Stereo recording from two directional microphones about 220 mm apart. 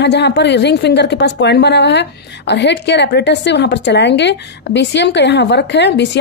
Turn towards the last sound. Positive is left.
turn(degrees=50)  # may be behind; listen again after turning